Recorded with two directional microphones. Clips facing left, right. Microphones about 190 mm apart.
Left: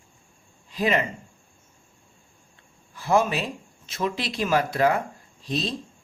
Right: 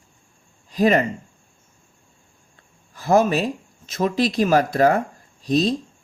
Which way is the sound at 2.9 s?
40° right (ahead or behind).